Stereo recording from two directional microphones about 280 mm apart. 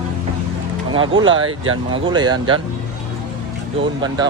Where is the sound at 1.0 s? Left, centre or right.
Right.